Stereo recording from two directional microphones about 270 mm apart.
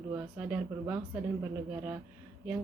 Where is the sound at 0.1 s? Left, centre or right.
Centre.